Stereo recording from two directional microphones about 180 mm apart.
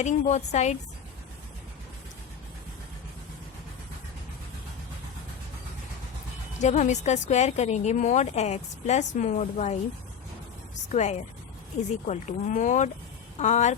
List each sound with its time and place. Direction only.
0.0 s a woman's voice: 40° left (ahead or behind)
6.6 s a woman's voice: 40° left (ahead or behind)
10.9 s a woman's voice: 40° left (ahead or behind)